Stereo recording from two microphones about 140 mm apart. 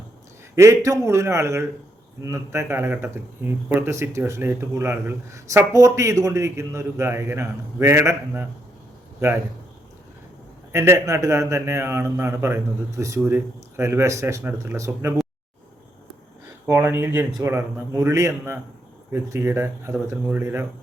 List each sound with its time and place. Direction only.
0.5 s speech: 20° right (ahead or behind)
10.7 s speech: 20° right (ahead or behind)
16.6 s speech: 20° right (ahead or behind)